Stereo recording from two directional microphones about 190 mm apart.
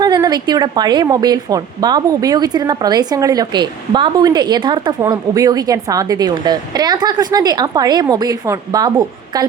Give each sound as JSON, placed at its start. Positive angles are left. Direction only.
{"t": 0.0, "sound": "a woman's voice", "side_deg": -20}